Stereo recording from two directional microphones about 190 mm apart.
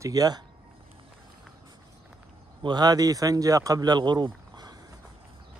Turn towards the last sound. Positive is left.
turn(degrees=-20)  # may be behind; listen again after turning